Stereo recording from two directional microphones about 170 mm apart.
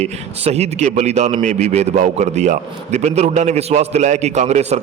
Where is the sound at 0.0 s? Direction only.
40° right (ahead or behind).